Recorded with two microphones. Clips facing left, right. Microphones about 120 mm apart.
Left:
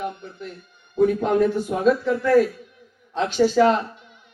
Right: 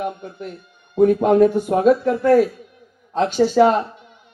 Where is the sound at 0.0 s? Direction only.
50° right (ahead or behind).